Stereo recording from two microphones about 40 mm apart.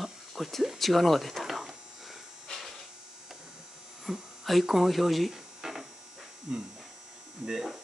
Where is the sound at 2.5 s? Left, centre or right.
Centre.